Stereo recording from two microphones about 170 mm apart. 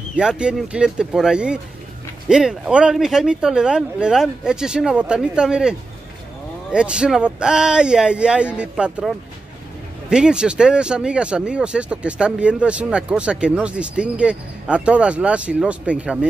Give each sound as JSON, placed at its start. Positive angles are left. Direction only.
{"t": 0.1, "sound": "speech", "side_deg": -5}